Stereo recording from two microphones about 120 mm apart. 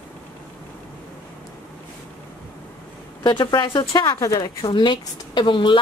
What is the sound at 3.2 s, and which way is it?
Speech, 35° left (ahead or behind).